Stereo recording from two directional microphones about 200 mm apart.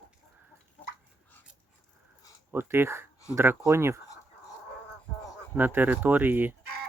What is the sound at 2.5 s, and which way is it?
Speech, 10° right (ahead or behind).